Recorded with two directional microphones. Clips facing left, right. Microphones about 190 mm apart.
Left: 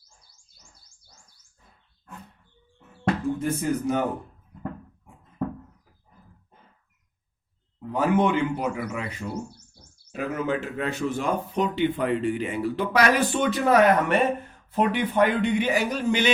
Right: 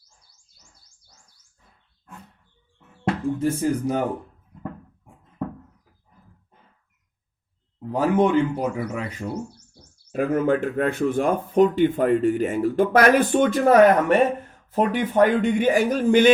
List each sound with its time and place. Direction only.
3.0 s speech: 30° right (ahead or behind)
7.8 s speech: 35° right (ahead or behind)
10.1 s speech: 50° right (ahead or behind)